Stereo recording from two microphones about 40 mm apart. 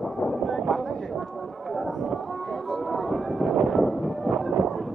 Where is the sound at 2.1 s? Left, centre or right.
Centre.